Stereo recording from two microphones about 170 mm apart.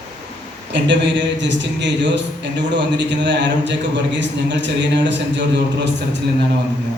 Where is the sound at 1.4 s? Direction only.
90° right.